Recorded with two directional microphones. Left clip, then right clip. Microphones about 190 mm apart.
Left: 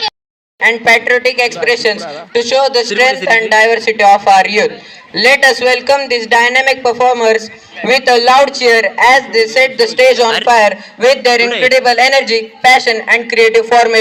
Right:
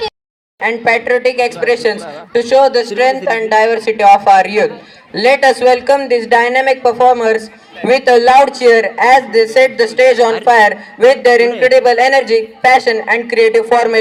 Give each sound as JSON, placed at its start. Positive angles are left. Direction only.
{"t": 0.6, "sound": "speech", "side_deg": -70}